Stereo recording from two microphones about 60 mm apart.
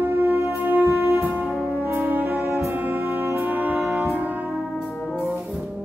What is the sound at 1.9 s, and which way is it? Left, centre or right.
Brass instrument, right.